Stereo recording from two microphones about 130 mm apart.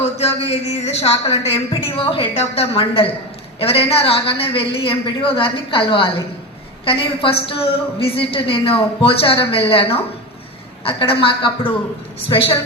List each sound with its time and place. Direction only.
0.0 s a woman's voice: 50° left (ahead or behind)